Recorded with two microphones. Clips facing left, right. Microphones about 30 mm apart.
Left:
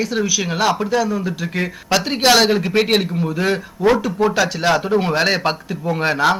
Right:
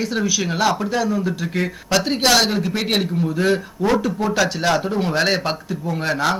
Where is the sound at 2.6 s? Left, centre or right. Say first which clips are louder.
Left 6 dB; left.